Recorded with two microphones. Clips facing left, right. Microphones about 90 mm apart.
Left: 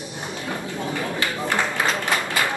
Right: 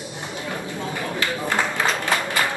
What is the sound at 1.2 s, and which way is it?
Run, 20° left (ahead or behind).